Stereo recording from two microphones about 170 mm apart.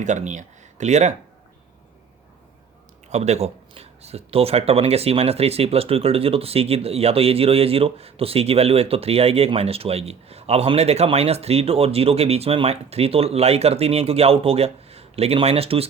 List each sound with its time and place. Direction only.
0.0 s speech: 45° right (ahead or behind)
3.1 s speech: 40° right (ahead or behind)